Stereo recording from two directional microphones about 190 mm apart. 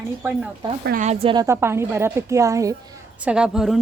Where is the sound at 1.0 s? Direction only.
35° right (ahead or behind).